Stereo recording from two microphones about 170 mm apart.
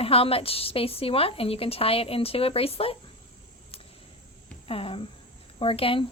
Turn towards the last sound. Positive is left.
turn(degrees=35)  # may be behind; listen again after turning